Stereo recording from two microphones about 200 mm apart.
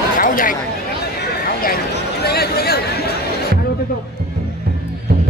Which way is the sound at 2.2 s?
50° left (ahead or behind).